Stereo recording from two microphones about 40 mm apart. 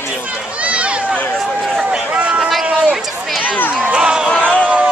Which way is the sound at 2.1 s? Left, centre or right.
Right.